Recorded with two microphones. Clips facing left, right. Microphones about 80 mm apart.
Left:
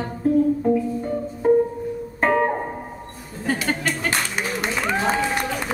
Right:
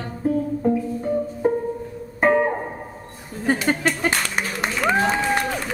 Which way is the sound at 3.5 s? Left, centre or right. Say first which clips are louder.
Right 3 dB; right.